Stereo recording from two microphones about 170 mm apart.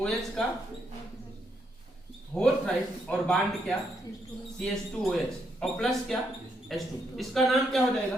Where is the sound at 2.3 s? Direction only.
15° right (ahead or behind).